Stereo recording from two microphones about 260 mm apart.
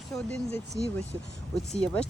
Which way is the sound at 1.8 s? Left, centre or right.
Centre.